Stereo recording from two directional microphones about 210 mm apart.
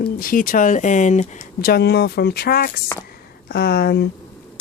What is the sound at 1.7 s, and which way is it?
Speech, 50° left (ahead or behind).